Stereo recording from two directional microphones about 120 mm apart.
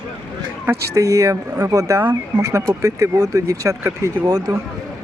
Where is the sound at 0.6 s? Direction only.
25° right (ahead or behind).